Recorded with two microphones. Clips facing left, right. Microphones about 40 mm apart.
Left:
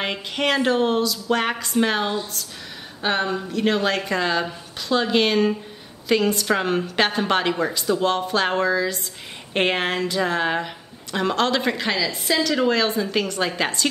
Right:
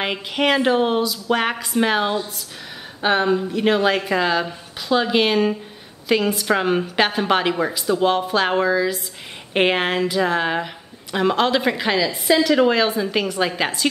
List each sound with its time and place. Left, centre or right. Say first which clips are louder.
0.0 s a woman's voice: right 3 dB; centre